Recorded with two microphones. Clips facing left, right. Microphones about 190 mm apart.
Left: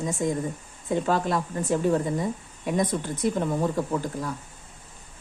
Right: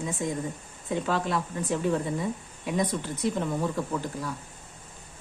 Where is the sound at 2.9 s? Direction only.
50° left (ahead or behind).